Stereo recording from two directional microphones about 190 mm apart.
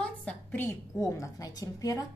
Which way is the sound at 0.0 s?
5° left (ahead or behind).